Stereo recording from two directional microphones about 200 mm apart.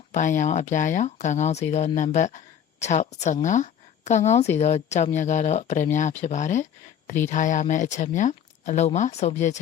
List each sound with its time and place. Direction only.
0.1 s a woman's voice: 40° left (ahead or behind)